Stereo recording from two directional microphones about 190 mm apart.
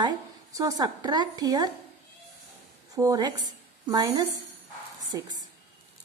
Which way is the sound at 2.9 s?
20° right (ahead or behind).